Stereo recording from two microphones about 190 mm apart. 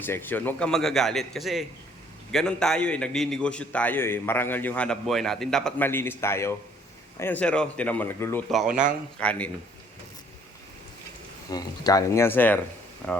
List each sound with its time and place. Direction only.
0.0 s a man's voice: 10° left (ahead or behind)
8.4 s a man's voice: centre (ahead or behind)
11.4 s speech: 20° left (ahead or behind)